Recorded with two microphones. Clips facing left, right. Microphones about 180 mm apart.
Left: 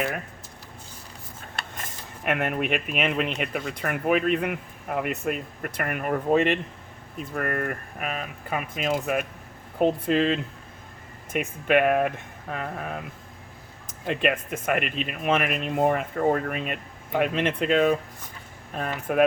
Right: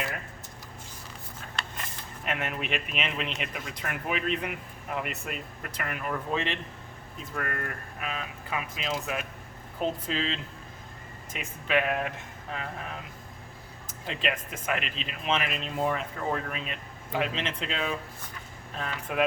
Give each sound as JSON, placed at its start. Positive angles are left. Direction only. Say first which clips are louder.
{"t": 1.5, "sound": "speech", "louder": "left 1 dB", "side_deg": 55}
{"t": 14.1, "sound": "speech", "louder": "left 7 dB", "side_deg": 55}